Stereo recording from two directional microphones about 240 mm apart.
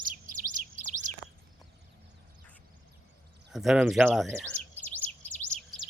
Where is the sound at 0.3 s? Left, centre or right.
Right.